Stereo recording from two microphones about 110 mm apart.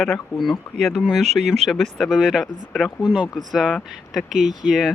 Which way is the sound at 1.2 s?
90° right.